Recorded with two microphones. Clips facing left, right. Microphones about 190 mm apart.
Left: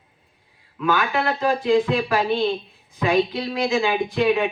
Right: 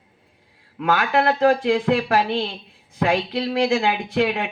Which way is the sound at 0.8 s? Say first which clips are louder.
Right 2 dB; 70° right (ahead or behind).